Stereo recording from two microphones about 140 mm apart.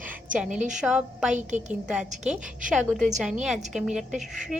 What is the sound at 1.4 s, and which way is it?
Speech, 60° right (ahead or behind).